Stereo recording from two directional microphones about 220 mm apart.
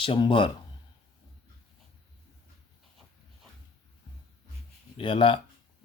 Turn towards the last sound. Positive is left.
turn(degrees=25)  # may be behind; listen again after turning